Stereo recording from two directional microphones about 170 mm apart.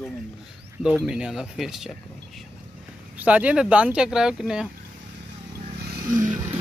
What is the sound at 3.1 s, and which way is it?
Speech, 10° right (ahead or behind).